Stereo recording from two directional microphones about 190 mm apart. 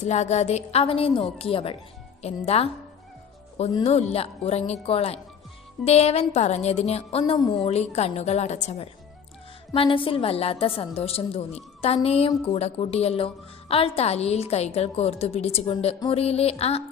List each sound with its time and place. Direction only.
0.0 s a woman's voice: 35° left (ahead or behind)
3.8 s a woman's voice: 35° left (ahead or behind)